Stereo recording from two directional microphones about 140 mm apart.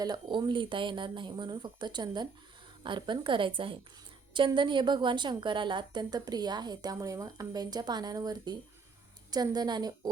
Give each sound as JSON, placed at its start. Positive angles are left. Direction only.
{"t": 0.0, "sound": "a woman's voice", "side_deg": -30}